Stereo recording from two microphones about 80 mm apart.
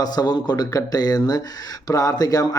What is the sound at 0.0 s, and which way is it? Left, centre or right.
Speech, left.